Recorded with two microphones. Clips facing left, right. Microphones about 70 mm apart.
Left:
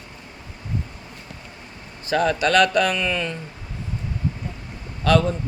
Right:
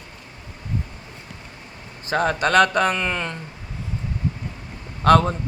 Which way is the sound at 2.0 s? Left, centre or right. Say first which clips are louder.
Left 1 dB; right.